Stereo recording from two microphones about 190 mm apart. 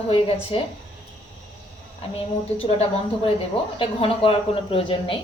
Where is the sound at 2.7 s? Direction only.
30° left (ahead or behind).